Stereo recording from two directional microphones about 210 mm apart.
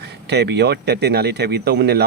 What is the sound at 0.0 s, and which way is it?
Speech, 55° right (ahead or behind).